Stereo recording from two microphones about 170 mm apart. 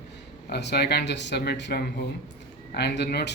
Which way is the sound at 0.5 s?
75° left (ahead or behind).